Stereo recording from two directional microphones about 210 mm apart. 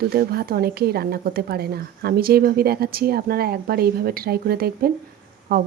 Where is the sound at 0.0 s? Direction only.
45° right (ahead or behind).